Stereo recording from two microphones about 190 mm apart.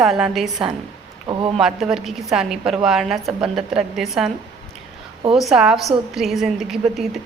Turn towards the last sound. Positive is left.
turn(degrees=0)  # may be behind; listen again after turning